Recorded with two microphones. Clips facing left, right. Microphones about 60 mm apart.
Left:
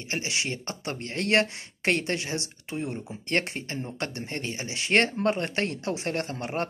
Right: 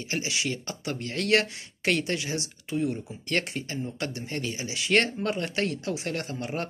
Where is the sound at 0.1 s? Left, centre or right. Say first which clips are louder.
Even; left.